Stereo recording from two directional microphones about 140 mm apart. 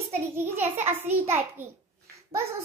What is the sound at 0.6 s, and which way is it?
Speech, 15° right (ahead or behind).